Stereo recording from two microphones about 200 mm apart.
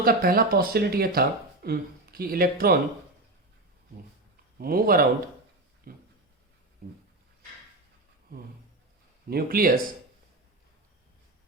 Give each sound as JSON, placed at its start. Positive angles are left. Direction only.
{"t": 0.0, "sound": "speech", "side_deg": -50}
{"t": 4.5, "sound": "speech", "side_deg": -45}
{"t": 9.3, "sound": "speech", "side_deg": -50}